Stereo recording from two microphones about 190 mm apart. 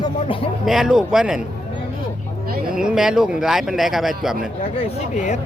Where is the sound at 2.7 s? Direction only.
5° right (ahead or behind).